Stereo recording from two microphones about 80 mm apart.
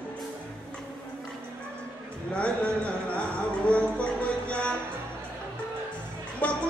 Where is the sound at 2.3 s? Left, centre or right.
Centre.